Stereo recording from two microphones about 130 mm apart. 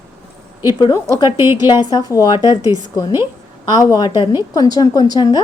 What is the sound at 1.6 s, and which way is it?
A woman's voice, 30° left (ahead or behind).